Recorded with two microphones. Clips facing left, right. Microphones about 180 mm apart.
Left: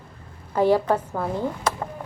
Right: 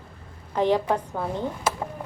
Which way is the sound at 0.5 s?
10° left (ahead or behind).